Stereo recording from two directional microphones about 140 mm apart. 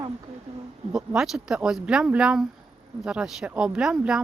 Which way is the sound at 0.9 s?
5° right (ahead or behind).